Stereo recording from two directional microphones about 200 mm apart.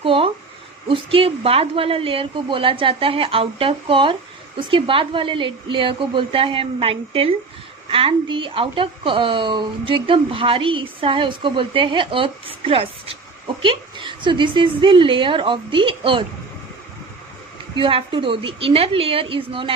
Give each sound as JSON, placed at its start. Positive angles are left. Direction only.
{"t": 0.0, "sound": "a woman's voice", "side_deg": -25}
{"t": 17.7, "sound": "a woman's voice", "side_deg": -25}